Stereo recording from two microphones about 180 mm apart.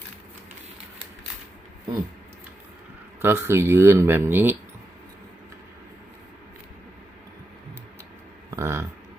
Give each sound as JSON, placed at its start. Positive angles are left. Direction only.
{"t": 3.2, "sound": "speech", "side_deg": -15}
{"t": 8.4, "sound": "speech", "side_deg": -15}